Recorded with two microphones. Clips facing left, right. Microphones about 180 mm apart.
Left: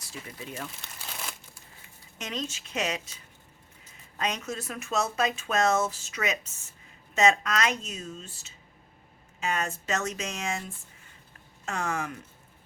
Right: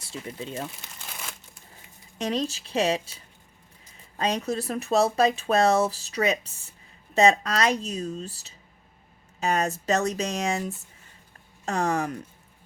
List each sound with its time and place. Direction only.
0.1 s speech: 25° right (ahead or behind)
2.1 s speech: 35° right (ahead or behind)
4.2 s speech: 35° right (ahead or behind)